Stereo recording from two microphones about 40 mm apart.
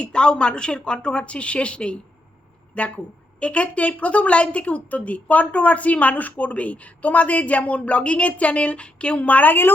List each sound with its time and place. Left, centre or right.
0.0 s a woman's voice: left
9.1 s a woman's voice: left